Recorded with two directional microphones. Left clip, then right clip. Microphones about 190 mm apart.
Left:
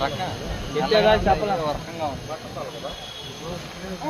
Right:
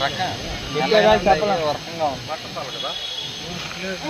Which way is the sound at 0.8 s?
40° right (ahead or behind).